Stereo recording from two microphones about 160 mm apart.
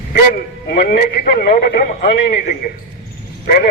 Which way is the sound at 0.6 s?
65° left (ahead or behind).